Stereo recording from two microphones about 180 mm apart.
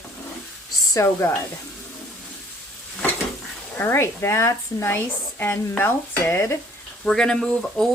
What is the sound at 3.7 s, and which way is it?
Speech, 15° left (ahead or behind).